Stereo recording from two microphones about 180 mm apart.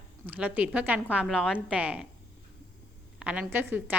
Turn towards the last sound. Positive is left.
turn(degrees=-10)  # may be behind; listen again after turning